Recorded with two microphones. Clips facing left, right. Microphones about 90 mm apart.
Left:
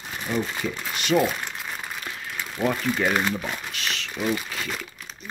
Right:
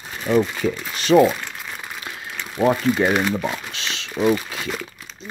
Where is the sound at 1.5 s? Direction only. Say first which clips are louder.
Even; centre (ahead or behind).